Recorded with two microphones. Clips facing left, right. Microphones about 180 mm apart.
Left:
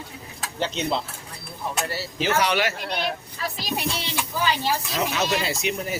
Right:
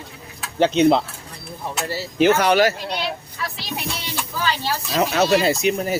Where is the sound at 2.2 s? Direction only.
55° right (ahead or behind).